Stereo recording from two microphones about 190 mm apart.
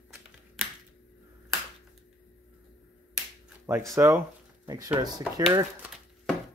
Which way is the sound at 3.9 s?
15° right (ahead or behind).